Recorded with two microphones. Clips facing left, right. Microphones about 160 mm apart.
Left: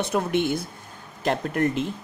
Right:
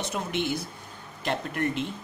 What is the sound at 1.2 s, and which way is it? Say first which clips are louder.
Speech: left 5 dB; 40° left (ahead or behind).